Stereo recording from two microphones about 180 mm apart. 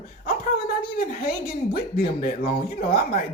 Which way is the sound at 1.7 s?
55° left (ahead or behind).